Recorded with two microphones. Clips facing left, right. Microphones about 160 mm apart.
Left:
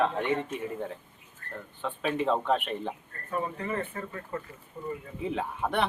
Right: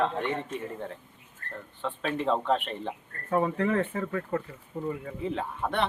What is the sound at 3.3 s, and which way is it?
Speech, 75° right (ahead or behind).